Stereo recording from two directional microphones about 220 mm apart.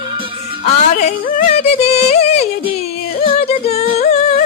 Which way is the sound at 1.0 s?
35° left (ahead or behind).